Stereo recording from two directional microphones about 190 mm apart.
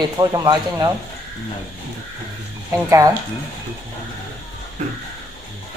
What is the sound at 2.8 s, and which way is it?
Speech, 15° right (ahead or behind).